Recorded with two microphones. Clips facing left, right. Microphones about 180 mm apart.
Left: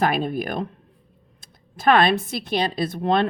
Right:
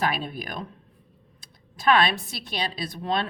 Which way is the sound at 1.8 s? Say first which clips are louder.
Left 4 dB; 50° left (ahead or behind).